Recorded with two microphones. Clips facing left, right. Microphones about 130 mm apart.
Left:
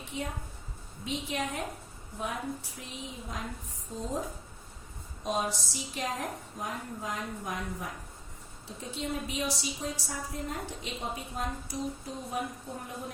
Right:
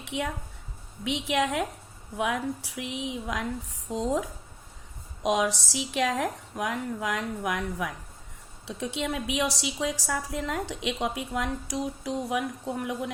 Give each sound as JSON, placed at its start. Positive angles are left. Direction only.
{"t": 0.0, "sound": "a woman's voice", "side_deg": -90}